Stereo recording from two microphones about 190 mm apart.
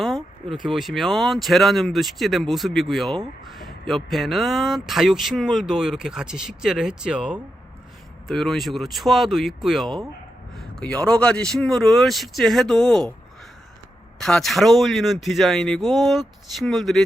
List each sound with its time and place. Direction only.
0.0 s speech: centre (ahead or behind)
14.2 s speech: centre (ahead or behind)